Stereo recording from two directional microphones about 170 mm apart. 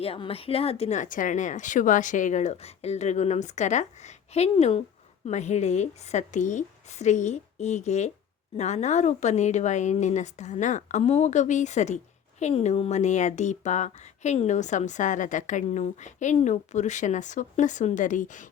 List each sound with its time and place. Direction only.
0.0 s speech: 35° left (ahead or behind)